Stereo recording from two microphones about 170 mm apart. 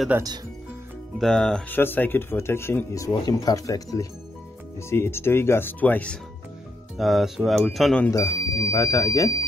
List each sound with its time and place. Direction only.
0.1 s speech: 10° right (ahead or behind)
1.1 s speech: 5° left (ahead or behind)
7.0 s speech: centre (ahead or behind)
8.1 s speech: 20° left (ahead or behind)